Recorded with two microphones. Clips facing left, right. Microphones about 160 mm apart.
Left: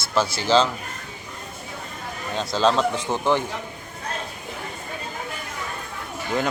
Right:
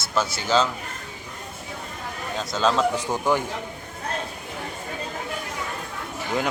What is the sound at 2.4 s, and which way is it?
Speech, 30° left (ahead or behind).